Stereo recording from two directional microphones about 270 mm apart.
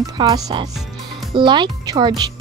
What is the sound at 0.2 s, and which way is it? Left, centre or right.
Speech, centre.